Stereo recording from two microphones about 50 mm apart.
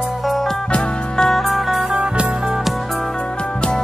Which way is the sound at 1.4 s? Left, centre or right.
Centre.